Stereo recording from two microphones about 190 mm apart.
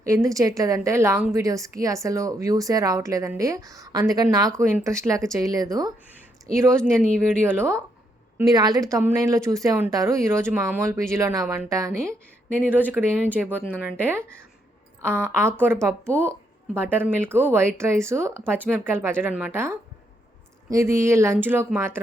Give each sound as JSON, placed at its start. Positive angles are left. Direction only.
{"t": 0.0, "sound": "a woman's voice", "side_deg": -15}
{"t": 6.7, "sound": "speech", "side_deg": 5}
{"t": 7.2, "sound": "a woman's voice", "side_deg": -10}
{"t": 13.0, "sound": "speech", "side_deg": -5}
{"t": 13.5, "sound": "speech", "side_deg": 10}
{"t": 13.8, "sound": "a woman's voice", "side_deg": -10}